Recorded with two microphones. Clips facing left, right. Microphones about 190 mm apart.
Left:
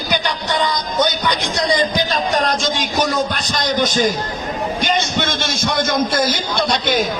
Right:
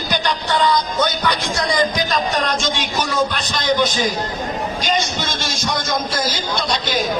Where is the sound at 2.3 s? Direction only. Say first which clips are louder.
Left 2 dB; 40° left (ahead or behind).